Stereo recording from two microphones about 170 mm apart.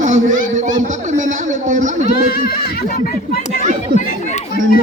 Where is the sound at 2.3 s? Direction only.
60° left (ahead or behind).